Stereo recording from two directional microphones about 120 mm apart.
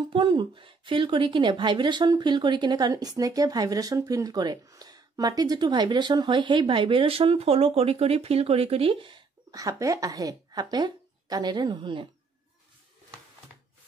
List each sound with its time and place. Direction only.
0.1 s a woman's voice: 40° right (ahead or behind)
9.5 s a woman's voice: 30° right (ahead or behind)